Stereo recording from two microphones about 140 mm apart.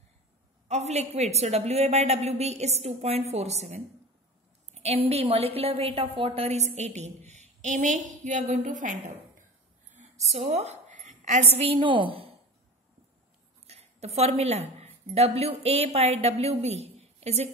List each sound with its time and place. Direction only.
0.7 s a woman's voice: 50° right (ahead or behind)
10.3 s a woman's voice: 50° right (ahead or behind)
11.6 s a woman's voice: 35° right (ahead or behind)
13.7 s a woman's voice: 50° right (ahead or behind)